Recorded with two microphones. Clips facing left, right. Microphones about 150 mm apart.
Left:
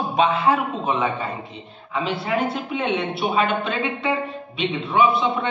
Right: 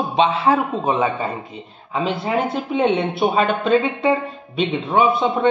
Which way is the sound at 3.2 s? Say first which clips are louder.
Right 3 dB; 45° right (ahead or behind).